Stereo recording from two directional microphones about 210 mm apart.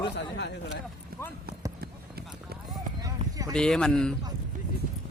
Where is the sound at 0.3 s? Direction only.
55° left (ahead or behind).